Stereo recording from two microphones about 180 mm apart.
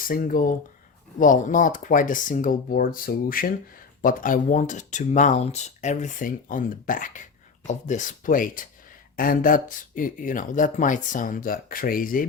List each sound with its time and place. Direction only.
0.0 s speech: 50° left (ahead or behind)